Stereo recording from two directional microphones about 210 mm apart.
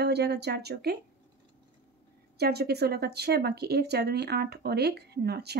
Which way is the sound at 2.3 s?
50° right (ahead or behind).